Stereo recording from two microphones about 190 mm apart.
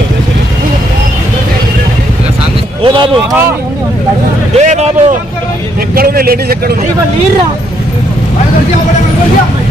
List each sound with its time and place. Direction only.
2.8 s speech: 25° right (ahead or behind)
4.6 s speech: 35° right (ahead or behind)
5.9 s a man's voice: 50° right (ahead or behind)